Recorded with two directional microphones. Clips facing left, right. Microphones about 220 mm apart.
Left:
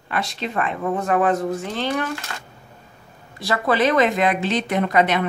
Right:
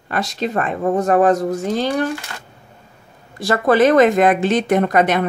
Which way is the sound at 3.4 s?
45° right (ahead or behind).